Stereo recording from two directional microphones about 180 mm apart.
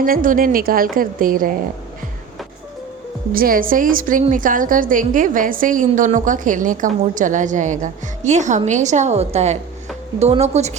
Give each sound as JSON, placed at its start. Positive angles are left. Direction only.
{"t": 0.0, "sound": "a woman's voice", "side_deg": -50}
{"t": 3.3, "sound": "a woman's voice", "side_deg": -50}